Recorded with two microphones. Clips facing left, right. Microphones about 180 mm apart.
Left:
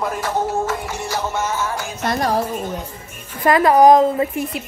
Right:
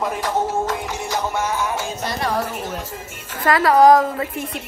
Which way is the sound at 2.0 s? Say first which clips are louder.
Left 9 dB; 55° left (ahead or behind).